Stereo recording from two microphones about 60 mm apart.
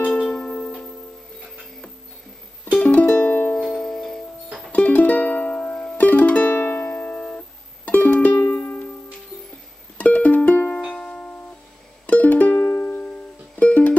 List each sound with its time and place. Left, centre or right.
0.0 s music: centre
2.6 s music: left
3.6 s music: centre
4.7 s music: left
9.9 s music: left
11.0 s music: centre
12.1 s music: left